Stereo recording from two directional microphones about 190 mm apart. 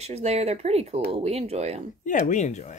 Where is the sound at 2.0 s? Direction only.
40° left (ahead or behind).